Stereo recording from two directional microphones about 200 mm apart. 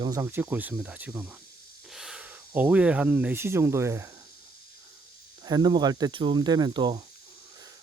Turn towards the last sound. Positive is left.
turn(degrees=-25)  # may be behind; listen again after turning